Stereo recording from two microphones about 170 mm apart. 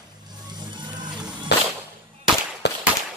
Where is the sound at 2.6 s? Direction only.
90° left.